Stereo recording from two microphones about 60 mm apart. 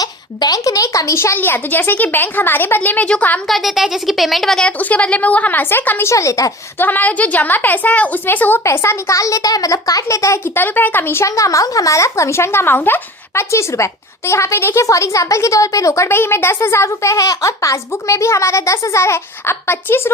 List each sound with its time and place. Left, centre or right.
0.0 s a child's voice: left
1.4 s a woman's voice: left
3.4 s a woman's voice: centre
4.8 s a woman's voice: left
6.1 s speech: left
6.7 s a woman's voice: left
8.6 s speech: left
10.4 s speech: left
11.3 s speech: left
13.5 s a woman's voice: left
14.8 s speech: left
16.0 s a woman's voice: left